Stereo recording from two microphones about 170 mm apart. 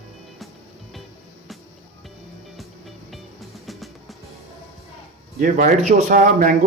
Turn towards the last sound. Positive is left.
turn(degrees=-50)  # may be behind; listen again after turning